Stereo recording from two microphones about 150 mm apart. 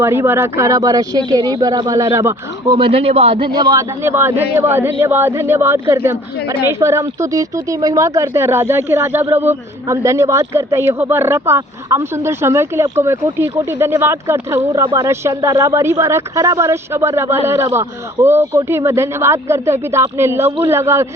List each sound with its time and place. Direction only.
0.0 s speech: 15° right (ahead or behind)
2.7 s speech: 35° right (ahead or behind); by 21.1 s 15° right (ahead or behind)